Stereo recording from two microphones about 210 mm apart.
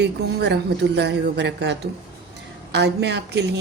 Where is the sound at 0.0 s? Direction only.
55° right (ahead or behind).